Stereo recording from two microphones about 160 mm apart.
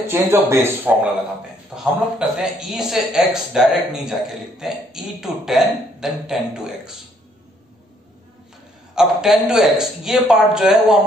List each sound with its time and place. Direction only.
0.0 s a man's voice: 15° right (ahead or behind)
1.7 s speech: 5° right (ahead or behind)
8.9 s speech: 5° right (ahead or behind)